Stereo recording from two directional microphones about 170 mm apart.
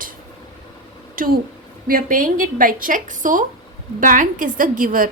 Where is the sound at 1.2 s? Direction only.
60° right (ahead or behind).